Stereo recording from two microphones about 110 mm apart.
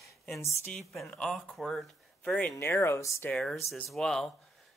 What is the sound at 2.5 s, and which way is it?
Speech, 25° left (ahead or behind).